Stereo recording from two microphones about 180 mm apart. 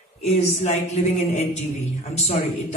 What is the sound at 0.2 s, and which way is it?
Music, 35° left (ahead or behind).